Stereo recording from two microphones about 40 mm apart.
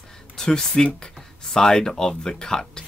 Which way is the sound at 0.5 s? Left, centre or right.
Centre.